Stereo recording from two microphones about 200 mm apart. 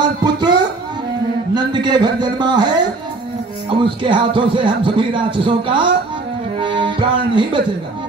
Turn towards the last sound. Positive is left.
turn(degrees=-25)  # may be behind; listen again after turning